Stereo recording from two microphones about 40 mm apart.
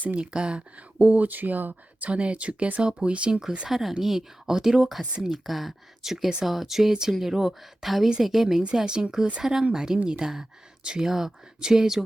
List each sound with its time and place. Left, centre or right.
0.2 s speech: right
0.9 s speech: right
2.0 s speech: right
3.7 s speech: centre